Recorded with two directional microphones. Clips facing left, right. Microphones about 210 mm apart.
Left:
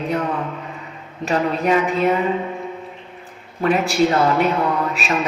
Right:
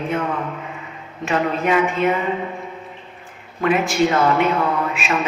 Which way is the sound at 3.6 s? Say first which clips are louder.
Left 1 dB; 35° left (ahead or behind).